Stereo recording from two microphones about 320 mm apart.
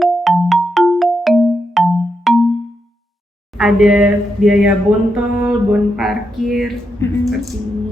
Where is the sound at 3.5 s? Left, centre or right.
Centre.